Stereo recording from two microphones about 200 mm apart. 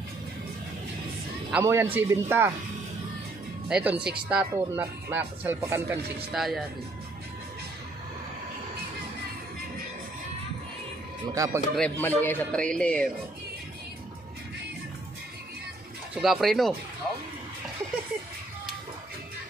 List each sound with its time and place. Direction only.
1.5 s speech: 15° right (ahead or behind)
3.6 s speech: 5° right (ahead or behind)
6.3 s speech: centre (ahead or behind)
11.3 s speech: 15° right (ahead or behind)
11.7 s speech: 5° left (ahead or behind)
16.2 s speech: centre (ahead or behind)